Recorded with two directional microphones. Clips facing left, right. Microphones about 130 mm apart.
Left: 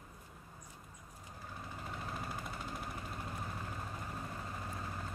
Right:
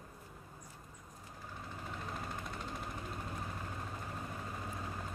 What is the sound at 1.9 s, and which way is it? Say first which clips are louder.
Vehicle: even; 5° left (ahead or behind).